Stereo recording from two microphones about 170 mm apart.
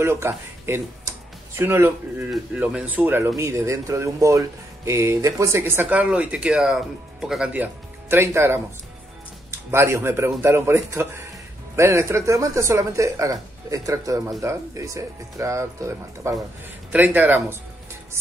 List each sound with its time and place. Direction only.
0.0 s speech: 15° right (ahead or behind)
9.7 s speech: 15° right (ahead or behind)